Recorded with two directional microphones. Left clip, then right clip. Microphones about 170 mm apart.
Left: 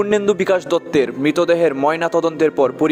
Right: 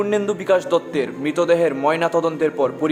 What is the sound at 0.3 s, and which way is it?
A man's voice, 40° left (ahead or behind).